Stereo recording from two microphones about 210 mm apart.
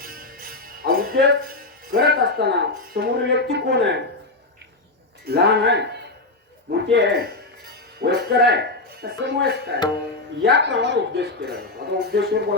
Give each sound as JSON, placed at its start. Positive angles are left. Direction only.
{"t": 0.0, "sound": "jingle bell", "side_deg": -40}
{"t": 3.0, "sound": "speech", "side_deg": -55}
{"t": 5.2, "sound": "speech", "side_deg": -50}
{"t": 6.9, "sound": "speech", "side_deg": -55}